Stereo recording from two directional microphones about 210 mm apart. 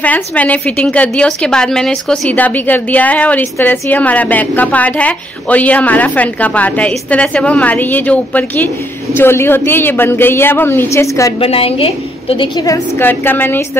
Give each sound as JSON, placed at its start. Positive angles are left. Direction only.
{"t": 0.0, "sound": "a woman's voice", "side_deg": 5}
{"t": 11.3, "sound": "a woman's voice", "side_deg": 30}